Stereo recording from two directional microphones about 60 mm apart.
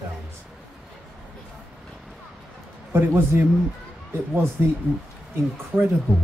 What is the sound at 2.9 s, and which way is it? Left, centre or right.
Speech, right.